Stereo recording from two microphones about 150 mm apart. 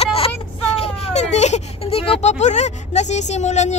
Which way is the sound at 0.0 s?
40° left (ahead or behind).